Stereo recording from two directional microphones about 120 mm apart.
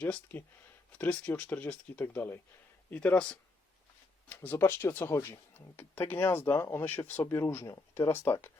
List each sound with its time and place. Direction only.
0.0 s speech: 10° left (ahead or behind)